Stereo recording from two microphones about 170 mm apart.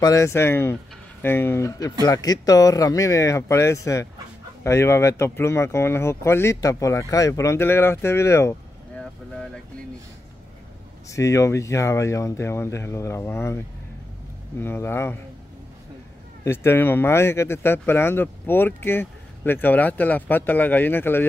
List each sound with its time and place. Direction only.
0.0 s speech: 20° left (ahead or behind)
11.1 s speech: 20° left (ahead or behind)
14.6 s speech: 15° left (ahead or behind)
16.4 s speech: 15° left (ahead or behind)